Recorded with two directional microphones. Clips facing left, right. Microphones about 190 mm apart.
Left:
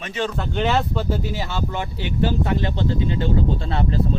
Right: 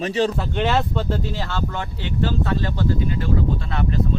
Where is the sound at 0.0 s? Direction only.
35° right (ahead or behind).